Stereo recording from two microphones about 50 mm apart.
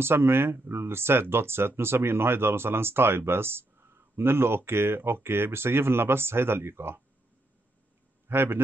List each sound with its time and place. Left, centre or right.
0.0 s speech: right
8.3 s a man's voice: right